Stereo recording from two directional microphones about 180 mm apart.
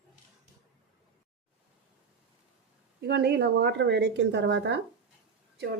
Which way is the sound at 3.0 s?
65° right (ahead or behind).